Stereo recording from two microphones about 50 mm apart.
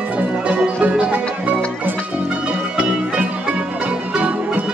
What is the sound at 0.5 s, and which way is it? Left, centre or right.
Music, right.